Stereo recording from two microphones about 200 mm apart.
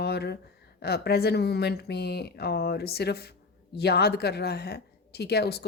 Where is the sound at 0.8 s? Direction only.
50° left (ahead or behind).